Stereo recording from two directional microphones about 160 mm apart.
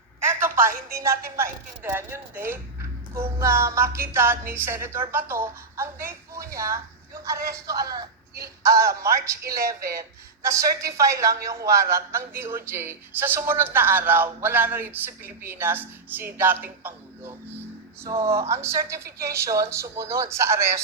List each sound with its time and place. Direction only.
0.9 s speech: 20° right (ahead or behind)
18.0 s speech: 15° right (ahead or behind)